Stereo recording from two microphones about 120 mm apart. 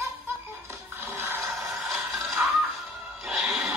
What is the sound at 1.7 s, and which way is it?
Music, centre (ahead or behind).